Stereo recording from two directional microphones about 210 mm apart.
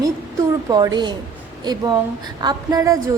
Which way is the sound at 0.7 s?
20° right (ahead or behind).